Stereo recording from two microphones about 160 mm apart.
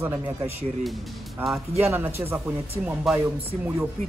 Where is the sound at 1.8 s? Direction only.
15° right (ahead or behind).